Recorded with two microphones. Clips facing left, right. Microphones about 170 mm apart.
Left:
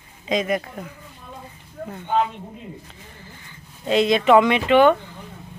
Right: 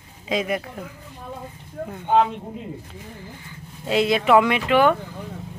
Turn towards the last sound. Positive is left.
turn(degrees=-5)  # may be behind; listen again after turning